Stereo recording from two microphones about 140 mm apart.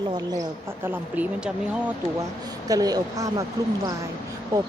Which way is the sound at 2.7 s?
25° right (ahead or behind).